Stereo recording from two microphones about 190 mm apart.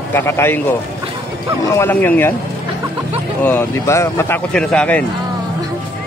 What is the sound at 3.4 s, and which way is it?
Speech, 10° left (ahead or behind).